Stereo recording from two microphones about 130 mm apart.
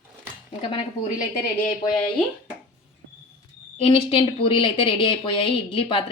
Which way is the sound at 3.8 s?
45° left (ahead or behind).